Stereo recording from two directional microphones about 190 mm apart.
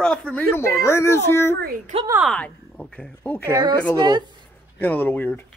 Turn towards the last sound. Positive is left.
turn(degrees=10)  # may be behind; listen again after turning